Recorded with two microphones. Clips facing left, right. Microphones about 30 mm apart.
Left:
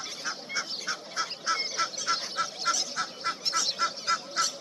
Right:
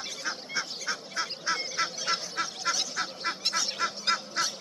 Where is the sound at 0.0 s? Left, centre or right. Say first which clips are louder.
Right 1 dB; centre.